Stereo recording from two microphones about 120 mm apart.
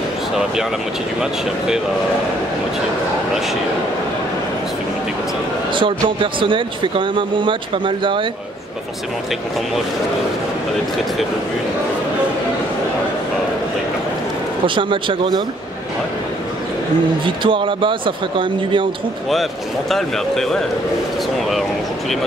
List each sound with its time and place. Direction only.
5.8 s speech: 45° right (ahead or behind)
14.8 s speech: 45° right (ahead or behind)
17.2 s speech: 45° right (ahead or behind)
19.9 s speech: centre (ahead or behind)